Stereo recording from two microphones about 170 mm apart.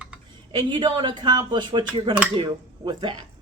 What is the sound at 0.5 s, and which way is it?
Speech, 25° right (ahead or behind).